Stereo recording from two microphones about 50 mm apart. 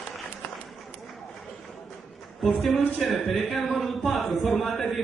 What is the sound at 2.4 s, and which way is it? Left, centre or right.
A man's voice, centre.